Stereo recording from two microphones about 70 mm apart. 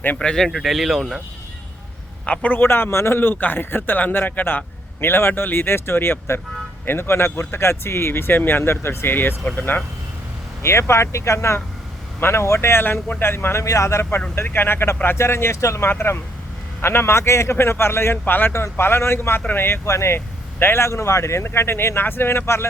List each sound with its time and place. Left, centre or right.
0.2 s speech: centre
2.2 s a man's voice: centre
2.6 s a man's voice: left
10.6 s speech: left
14.3 s speech: left